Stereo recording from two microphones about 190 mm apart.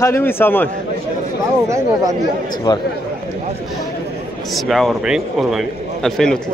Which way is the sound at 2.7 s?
20° left (ahead or behind).